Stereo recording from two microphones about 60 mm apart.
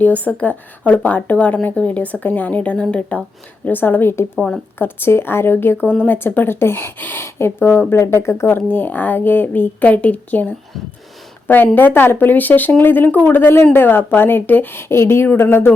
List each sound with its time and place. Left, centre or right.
0.0 s a woman's voice: left
3.7 s speech: left
4.4 s a woman's voice: centre
4.8 s speech: left